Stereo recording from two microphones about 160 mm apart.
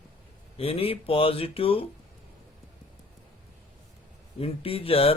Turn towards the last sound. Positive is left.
turn(degrees=35)  # may be behind; listen again after turning